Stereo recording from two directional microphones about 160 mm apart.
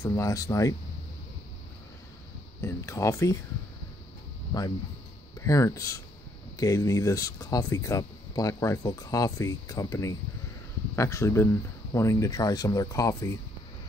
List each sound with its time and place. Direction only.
0.0 s speech: 20° left (ahead or behind)
2.6 s speech: 20° left (ahead or behind)
5.4 s speech: 20° left (ahead or behind)